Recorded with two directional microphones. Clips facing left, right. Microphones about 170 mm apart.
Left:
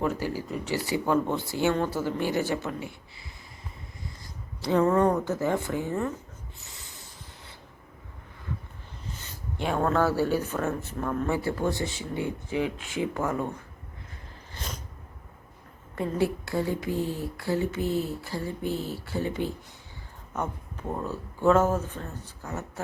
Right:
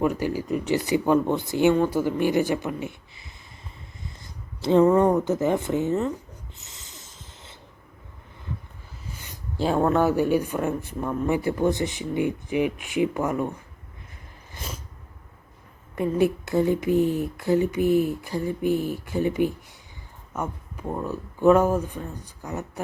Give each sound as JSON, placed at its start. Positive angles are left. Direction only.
{"t": 0.0, "sound": "speech", "side_deg": -15}
{"t": 6.6, "sound": "snort", "side_deg": -20}
{"t": 9.6, "sound": "speech", "side_deg": -30}
{"t": 9.8, "sound": "speech", "side_deg": -20}
{"t": 14.5, "sound": "a sound", "side_deg": -10}
{"t": 16.0, "sound": "speech", "side_deg": -20}